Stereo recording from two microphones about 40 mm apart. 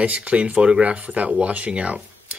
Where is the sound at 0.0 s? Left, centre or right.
Right.